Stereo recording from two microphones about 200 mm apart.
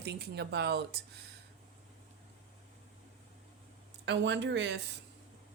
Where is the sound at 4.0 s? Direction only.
65° right (ahead or behind).